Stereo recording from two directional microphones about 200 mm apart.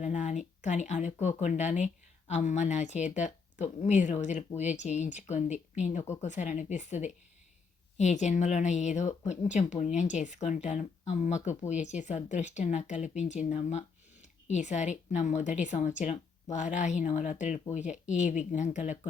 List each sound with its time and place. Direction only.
0.0 s speech: 35° left (ahead or behind)